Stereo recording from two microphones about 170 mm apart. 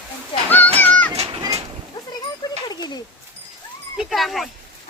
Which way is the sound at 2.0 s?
25° left (ahead or behind).